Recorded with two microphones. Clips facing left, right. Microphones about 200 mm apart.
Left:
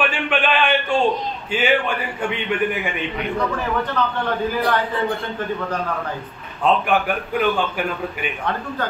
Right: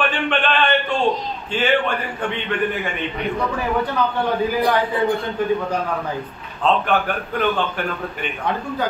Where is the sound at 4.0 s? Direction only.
10° right (ahead or behind).